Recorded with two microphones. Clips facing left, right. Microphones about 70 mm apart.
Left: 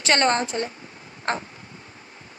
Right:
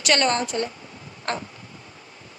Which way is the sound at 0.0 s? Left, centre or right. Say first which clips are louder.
Left 1 dB; left.